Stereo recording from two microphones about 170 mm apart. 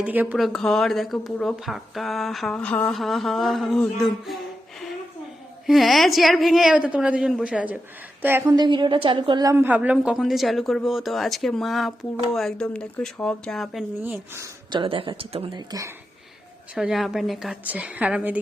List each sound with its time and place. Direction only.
0.0 s speech: 10° right (ahead or behind)
0.3 s speech: centre (ahead or behind)
5.6 s speech: centre (ahead or behind)
8.5 s speech: 25° right (ahead or behind); by 13.8 s centre (ahead or behind)
14.0 s speech: 10° right (ahead or behind)
14.7 s speech: 30° right (ahead or behind)
16.7 s speech: centre (ahead or behind)